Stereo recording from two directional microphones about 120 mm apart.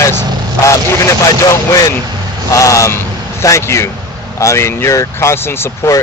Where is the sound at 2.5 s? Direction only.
25° left (ahead or behind).